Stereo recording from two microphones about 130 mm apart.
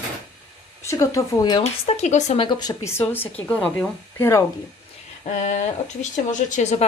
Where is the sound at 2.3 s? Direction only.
40° left (ahead or behind).